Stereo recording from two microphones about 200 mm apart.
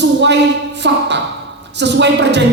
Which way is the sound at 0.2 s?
60° right (ahead or behind).